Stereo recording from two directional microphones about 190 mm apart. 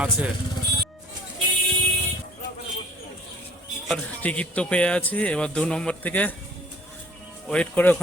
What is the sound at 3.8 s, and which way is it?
A man's voice, 5° left (ahead or behind).